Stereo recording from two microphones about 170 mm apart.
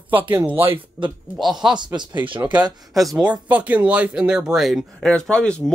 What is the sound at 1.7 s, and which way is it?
Speech, 25° right (ahead or behind).